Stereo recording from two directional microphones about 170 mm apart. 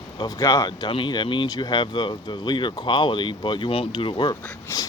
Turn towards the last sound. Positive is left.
turn(degrees=25)  # may be behind; listen again after turning